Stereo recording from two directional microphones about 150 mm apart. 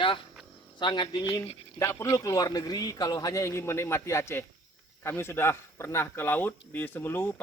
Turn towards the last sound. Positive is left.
turn(degrees=15)  # may be behind; listen again after turning